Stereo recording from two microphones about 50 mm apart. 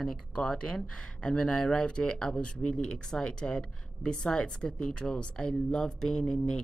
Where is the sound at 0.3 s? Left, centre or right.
Centre.